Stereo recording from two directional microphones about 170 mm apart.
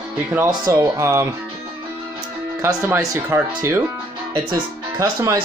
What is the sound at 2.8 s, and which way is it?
Speech, 10° right (ahead or behind).